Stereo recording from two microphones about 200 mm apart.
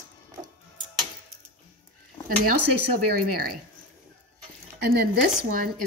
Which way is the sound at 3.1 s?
50° right (ahead or behind).